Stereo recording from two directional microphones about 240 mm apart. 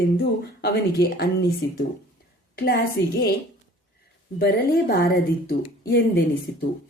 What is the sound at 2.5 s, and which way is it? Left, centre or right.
Speech, left.